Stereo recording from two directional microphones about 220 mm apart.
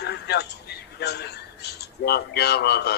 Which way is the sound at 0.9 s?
50° left (ahead or behind).